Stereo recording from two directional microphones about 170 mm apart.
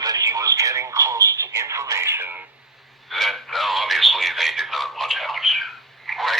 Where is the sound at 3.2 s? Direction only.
Centre (ahead or behind).